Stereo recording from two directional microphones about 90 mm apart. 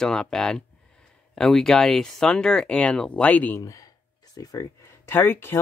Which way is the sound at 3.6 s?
40° left (ahead or behind).